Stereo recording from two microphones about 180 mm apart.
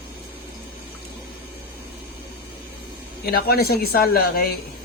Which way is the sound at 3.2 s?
55° left (ahead or behind).